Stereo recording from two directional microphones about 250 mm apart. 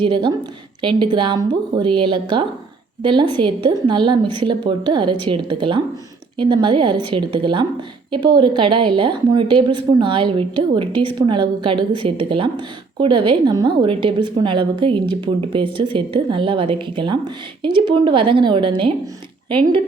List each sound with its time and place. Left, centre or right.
0.0 s a woman's voice: centre